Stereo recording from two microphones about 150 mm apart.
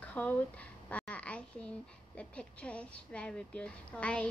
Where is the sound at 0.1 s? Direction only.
10° left (ahead or behind).